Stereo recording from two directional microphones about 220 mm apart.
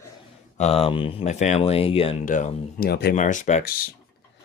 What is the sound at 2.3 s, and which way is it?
Speech, 35° left (ahead or behind).